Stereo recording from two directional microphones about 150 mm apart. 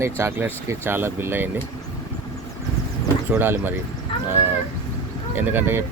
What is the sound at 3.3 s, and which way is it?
Speech, 15° right (ahead or behind).